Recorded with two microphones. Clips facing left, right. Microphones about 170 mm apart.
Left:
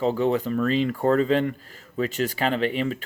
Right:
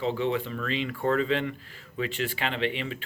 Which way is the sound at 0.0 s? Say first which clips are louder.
Left 5 dB; 40° left (ahead or behind).